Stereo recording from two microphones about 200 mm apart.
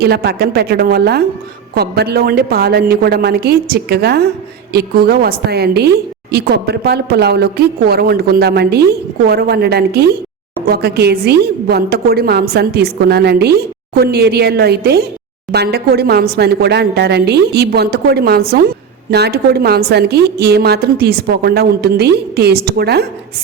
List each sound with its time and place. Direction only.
0.0 s a woman's voice: 50° right (ahead or behind)